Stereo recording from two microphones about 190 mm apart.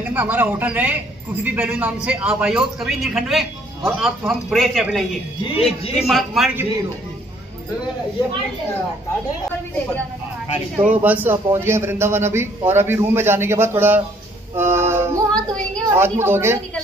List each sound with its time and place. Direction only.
0.1 s a man's voice: 10° right (ahead or behind)
5.4 s a man's voice: 30° left (ahead or behind)
6.0 s a man's voice: centre (ahead or behind)
10.8 s a man's voice: 10° right (ahead or behind)
14.5 s a sound: 15° right (ahead or behind)
15.3 s a man's voice: 5° left (ahead or behind)
16.0 s a man's voice: 10° right (ahead or behind)